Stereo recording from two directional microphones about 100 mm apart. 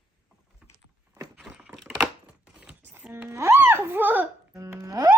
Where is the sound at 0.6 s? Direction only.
10° right (ahead or behind).